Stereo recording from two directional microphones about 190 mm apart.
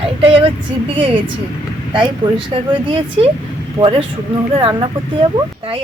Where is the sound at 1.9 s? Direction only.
25° right (ahead or behind).